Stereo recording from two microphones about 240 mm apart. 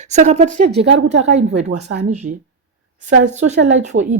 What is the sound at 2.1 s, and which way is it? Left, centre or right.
Speech, right.